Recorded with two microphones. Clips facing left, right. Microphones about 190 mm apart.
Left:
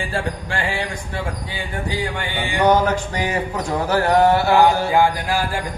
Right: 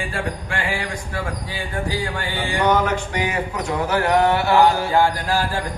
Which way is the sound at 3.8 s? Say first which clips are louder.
Left 2 dB; 40° left (ahead or behind).